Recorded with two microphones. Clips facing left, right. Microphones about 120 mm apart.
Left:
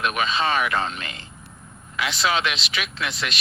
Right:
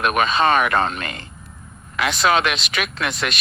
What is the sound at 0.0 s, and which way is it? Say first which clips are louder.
Speech: right 5 dB; 55° right (ahead or behind).